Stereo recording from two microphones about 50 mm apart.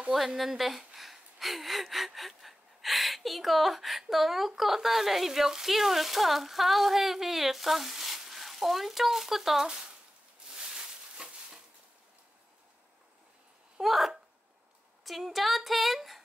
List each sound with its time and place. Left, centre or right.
0.1 s speech: centre
10.5 s a sound: centre
13.7 s speech: centre